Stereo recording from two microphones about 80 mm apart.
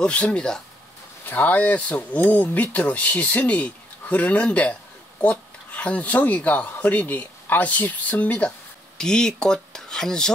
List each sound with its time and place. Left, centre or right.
0.0 s speech: centre
1.2 s speech: left; by 10.3 s centre